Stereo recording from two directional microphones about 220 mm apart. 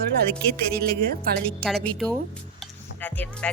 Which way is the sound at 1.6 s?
Centre (ahead or behind).